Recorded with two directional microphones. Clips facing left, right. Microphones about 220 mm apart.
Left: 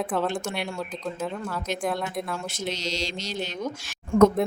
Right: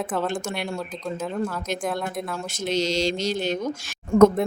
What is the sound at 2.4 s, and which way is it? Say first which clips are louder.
Speech: right 6 dB; 45° right (ahead or behind).